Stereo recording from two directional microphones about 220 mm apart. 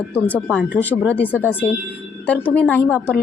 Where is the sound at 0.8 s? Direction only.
5° left (ahead or behind).